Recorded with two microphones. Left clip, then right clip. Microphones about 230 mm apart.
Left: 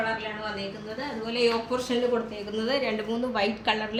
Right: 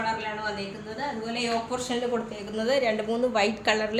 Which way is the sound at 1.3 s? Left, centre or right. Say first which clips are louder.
Left 6 dB; centre.